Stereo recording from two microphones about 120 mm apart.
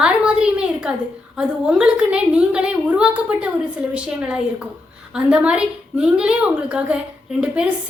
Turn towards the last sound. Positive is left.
turn(degrees=-10)  # may be behind; listen again after turning